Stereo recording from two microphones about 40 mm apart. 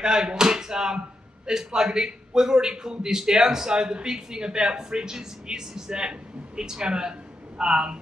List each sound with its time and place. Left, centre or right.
0.0 s speech: centre